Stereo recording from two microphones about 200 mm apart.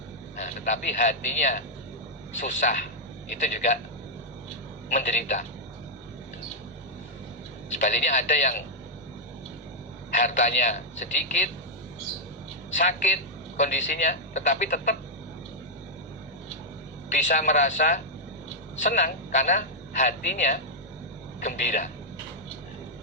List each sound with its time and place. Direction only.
0.4 s a man's voice: 40° left (ahead or behind)
4.9 s a man's voice: 40° left (ahead or behind)
7.8 s a man's voice: 40° left (ahead or behind)
10.2 s a man's voice: 40° left (ahead or behind)
12.7 s a man's voice: 40° left (ahead or behind)
17.1 s a man's voice: 40° left (ahead or behind)